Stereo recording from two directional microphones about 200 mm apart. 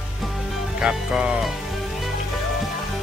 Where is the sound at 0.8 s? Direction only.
5° right (ahead or behind).